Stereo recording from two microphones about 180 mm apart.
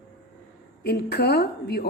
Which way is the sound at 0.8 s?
60° left (ahead or behind).